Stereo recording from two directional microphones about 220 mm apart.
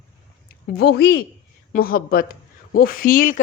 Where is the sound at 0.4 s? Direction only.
45° left (ahead or behind).